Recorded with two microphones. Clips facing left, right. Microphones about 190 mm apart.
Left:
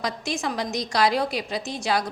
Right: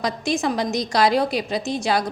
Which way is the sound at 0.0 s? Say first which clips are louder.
Right 5 dB; 25° right (ahead or behind).